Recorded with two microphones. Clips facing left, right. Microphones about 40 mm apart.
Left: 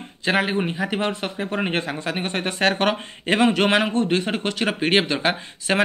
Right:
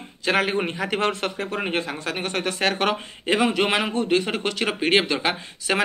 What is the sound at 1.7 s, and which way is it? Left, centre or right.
Speech, left.